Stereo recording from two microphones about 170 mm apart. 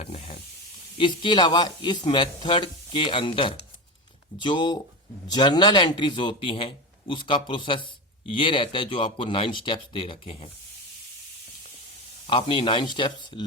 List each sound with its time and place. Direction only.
0.0 s hiss: 40° left (ahead or behind)
0.9 s speech: 30° left (ahead or behind)
12.3 s speech: 30° left (ahead or behind)